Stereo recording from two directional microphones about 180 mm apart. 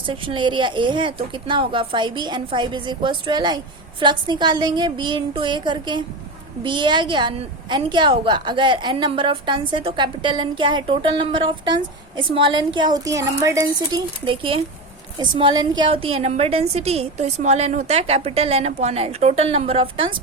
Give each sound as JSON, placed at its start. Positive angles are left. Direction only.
{"t": 0.0, "sound": "a woman's voice", "side_deg": -25}